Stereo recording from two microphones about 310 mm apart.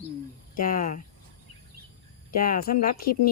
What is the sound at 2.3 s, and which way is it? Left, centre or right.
Speech, left.